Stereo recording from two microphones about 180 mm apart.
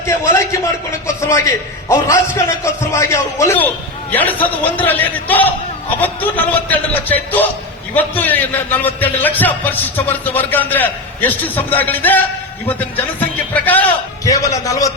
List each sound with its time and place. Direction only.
0.0 s a man's voice: 15° left (ahead or behind)
13.1 s music: 10° left (ahead or behind)
14.3 s a man's voice: 20° left (ahead or behind)